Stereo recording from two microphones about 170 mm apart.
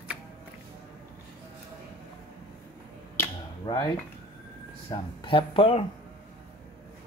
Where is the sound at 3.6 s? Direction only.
25° left (ahead or behind).